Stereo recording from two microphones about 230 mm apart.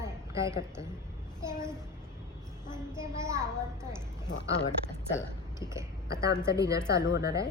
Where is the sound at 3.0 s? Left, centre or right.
Centre.